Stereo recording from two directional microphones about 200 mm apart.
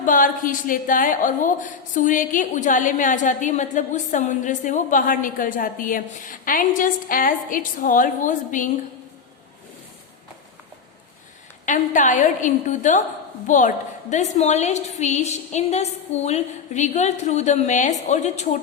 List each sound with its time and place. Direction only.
0.0 s a woman's voice: 40° left (ahead or behind)
11.6 s a woman's voice: 40° left (ahead or behind)